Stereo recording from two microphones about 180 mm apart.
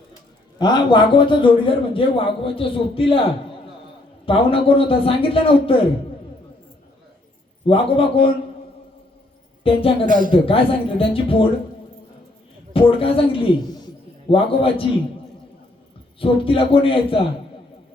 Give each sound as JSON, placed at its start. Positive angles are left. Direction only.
{"t": 0.6, "sound": "a man's voice", "side_deg": 25}
{"t": 4.3, "sound": "a man's voice", "side_deg": 30}
{"t": 7.7, "sound": "a man's voice", "side_deg": 30}
{"t": 9.6, "sound": "a man's voice", "side_deg": 30}
{"t": 10.1, "sound": "speech", "side_deg": -50}
{"t": 10.3, "sound": "a man's voice", "side_deg": 30}
{"t": 12.7, "sound": "a man's voice", "side_deg": 30}
{"t": 16.2, "sound": "a man's voice", "side_deg": 30}